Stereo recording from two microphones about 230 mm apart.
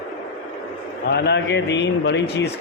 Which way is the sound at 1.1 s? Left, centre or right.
Left.